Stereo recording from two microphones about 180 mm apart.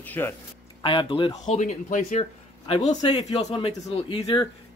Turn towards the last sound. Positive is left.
turn(degrees=30)  # may be behind; listen again after turning